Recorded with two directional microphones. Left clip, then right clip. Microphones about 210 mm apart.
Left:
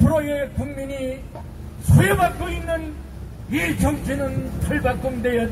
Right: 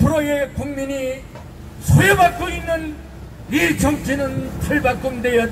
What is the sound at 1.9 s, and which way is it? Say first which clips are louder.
A man's voice: right 5 dB; 35° right (ahead or behind).